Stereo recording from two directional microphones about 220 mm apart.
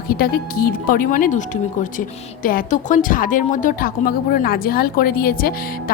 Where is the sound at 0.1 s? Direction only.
45° left (ahead or behind).